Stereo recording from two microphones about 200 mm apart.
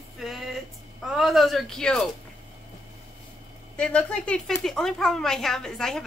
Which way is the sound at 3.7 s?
5° left (ahead or behind).